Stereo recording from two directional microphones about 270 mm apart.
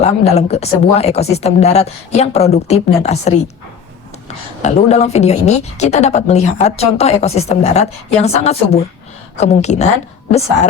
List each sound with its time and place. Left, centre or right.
0.0 s a woman's voice: left
4.6 s a woman's voice: left